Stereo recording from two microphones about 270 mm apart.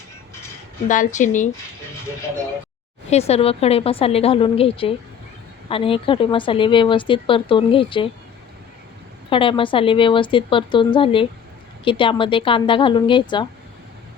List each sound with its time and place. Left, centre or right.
0.9 s a woman's voice: left
3.1 s a woman's voice: left
9.3 s a woman's voice: centre